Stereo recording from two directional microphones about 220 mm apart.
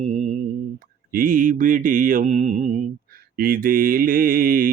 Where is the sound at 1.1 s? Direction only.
40° right (ahead or behind).